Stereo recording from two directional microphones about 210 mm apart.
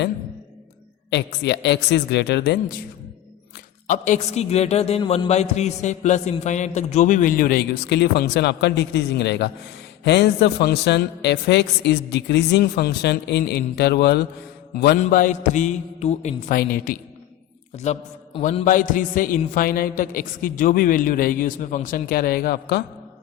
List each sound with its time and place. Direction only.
1.1 s a man's voice: 55° left (ahead or behind)
3.8 s a man's voice: 35° left (ahead or behind)
15.0 s a man's voice: 35° left (ahead or behind)
18.3 s music: 30° left (ahead or behind)
18.6 s a man's voice: 40° left (ahead or behind)